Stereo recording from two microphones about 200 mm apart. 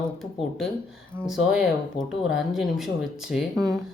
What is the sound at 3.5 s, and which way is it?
Speech, 15° right (ahead or behind).